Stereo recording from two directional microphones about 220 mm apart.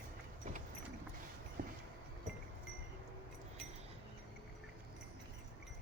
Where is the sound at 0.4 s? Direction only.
30° right (ahead or behind).